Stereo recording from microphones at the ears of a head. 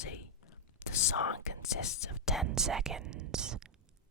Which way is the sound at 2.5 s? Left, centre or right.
Right.